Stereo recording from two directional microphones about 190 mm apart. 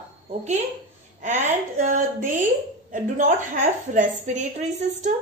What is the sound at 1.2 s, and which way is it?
A woman's voice, 40° right (ahead or behind).